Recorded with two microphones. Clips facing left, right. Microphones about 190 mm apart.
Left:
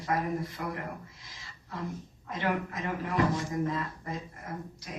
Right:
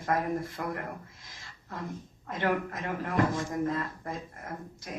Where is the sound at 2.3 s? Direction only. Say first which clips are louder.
Right 2 dB; 50° right (ahead or behind).